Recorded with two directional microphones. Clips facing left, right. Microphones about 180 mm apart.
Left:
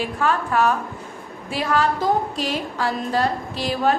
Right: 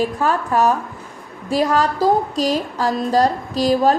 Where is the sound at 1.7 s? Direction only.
40° right (ahead or behind).